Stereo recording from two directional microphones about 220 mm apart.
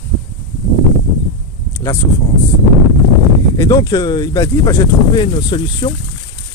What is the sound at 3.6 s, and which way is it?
Speech, 15° left (ahead or behind).